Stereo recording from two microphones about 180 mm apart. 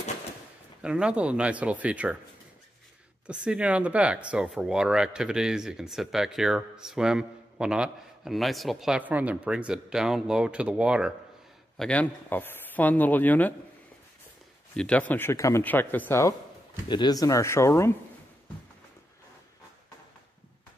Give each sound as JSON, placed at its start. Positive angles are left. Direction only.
{"t": 0.8, "sound": "speech", "side_deg": -5}
{"t": 3.3, "sound": "speech", "side_deg": -5}
{"t": 11.8, "sound": "a man's voice", "side_deg": 5}
{"t": 14.8, "sound": "a man's voice", "side_deg": 5}